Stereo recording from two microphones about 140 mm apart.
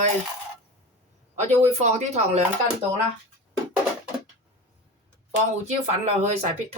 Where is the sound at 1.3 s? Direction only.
55° right (ahead or behind).